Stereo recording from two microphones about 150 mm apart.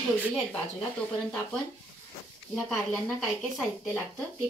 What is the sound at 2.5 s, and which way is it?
Speech, centre (ahead or behind).